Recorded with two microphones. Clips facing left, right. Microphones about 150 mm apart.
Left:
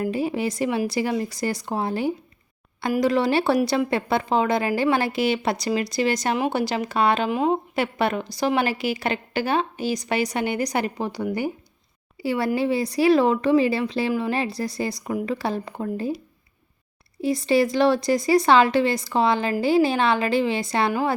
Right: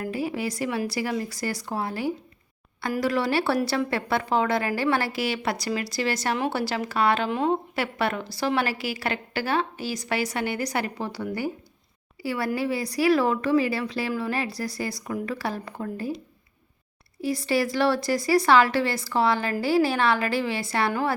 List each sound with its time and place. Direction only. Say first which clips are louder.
0.0 s a woman's voice: left 4 dB; 20° left (ahead or behind)
17.2 s a woman's voice: left 5 dB; 20° left (ahead or behind)